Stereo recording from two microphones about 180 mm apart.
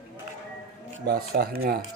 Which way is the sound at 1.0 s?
55° right (ahead or behind).